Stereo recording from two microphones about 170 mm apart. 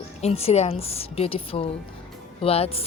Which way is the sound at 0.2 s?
40° left (ahead or behind).